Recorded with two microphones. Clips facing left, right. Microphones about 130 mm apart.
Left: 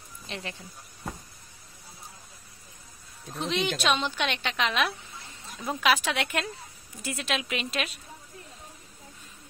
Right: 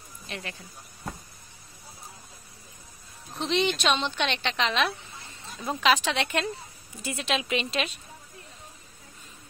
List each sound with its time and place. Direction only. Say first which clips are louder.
0.3 s speech: even; 20° left (ahead or behind)
3.3 s a woman's voice: right 3 dB; 5° left (ahead or behind)